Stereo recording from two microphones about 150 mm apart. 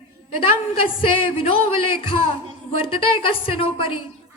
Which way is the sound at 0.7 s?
35° left (ahead or behind).